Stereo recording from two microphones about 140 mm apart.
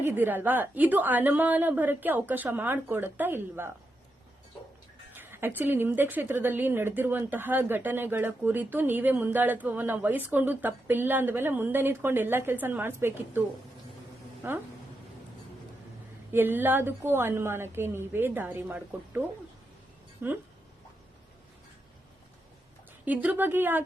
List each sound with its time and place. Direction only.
0.0 s a woman's voice: 15° right (ahead or behind)
5.1 s a woman's voice: 15° right (ahead or behind)
14.4 s a woman's voice: 15° right (ahead or behind)
16.3 s a woman's voice: 15° right (ahead or behind)
20.2 s a woman's voice: 15° right (ahead or behind)
23.0 s a woman's voice: 10° right (ahead or behind)